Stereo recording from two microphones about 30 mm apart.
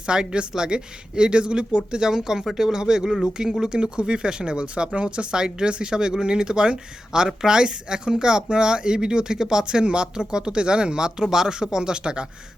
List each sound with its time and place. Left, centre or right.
0.1 s speech: right